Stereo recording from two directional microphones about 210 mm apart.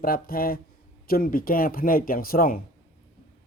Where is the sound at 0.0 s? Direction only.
45° left (ahead or behind).